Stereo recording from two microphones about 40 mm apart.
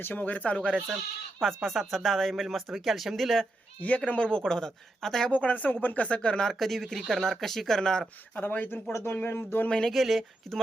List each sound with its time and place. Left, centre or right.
0.1 s speech: left
0.5 s speech: left
1.4 s speech: centre
3.8 s speech: left; by 5.3 s centre
5.3 s speech: left
6.1 s speech: left
6.4 s speech: centre
8.4 s speech: left
9.1 s speech: left
9.9 s speech: centre